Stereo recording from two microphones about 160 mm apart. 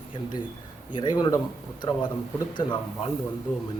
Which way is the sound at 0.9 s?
25° left (ahead or behind).